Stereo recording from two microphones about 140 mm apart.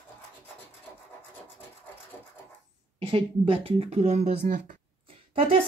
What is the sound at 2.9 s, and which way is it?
Speech, 40° right (ahead or behind).